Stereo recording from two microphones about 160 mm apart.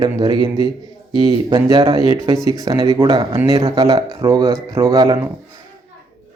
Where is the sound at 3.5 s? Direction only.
35° right (ahead or behind).